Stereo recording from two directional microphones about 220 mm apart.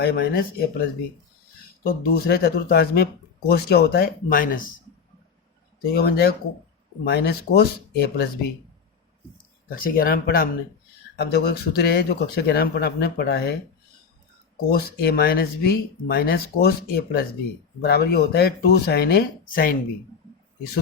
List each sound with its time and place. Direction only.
0.0 s speech: 45° left (ahead or behind)
5.9 s speech: 45° left (ahead or behind)
9.6 s speech: 40° left (ahead or behind)
14.5 s speech: 45° left (ahead or behind)